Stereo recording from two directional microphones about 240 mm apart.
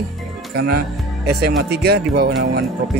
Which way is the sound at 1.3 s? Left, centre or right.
Right.